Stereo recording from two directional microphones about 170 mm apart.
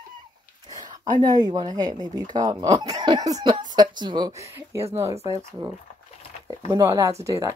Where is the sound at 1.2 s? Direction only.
25° right (ahead or behind).